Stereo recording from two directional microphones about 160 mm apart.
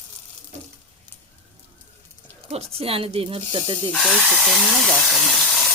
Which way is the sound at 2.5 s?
40° right (ahead or behind).